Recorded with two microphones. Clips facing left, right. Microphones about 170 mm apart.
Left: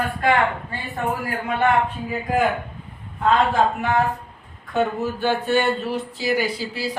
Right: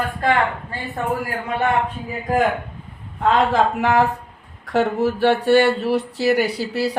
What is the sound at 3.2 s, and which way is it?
Speech, 90° right.